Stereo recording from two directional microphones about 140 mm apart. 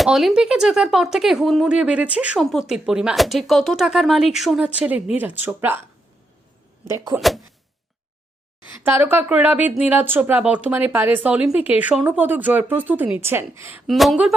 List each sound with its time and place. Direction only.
0.0 s speech: centre (ahead or behind)
6.8 s speech: 20° right (ahead or behind)
7.2 s speech: centre (ahead or behind)
8.7 s speech: 15° right (ahead or behind)
13.8 s speech: centre (ahead or behind)